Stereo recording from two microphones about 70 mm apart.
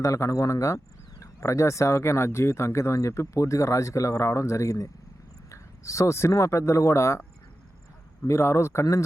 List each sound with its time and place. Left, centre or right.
0.0 s speech: left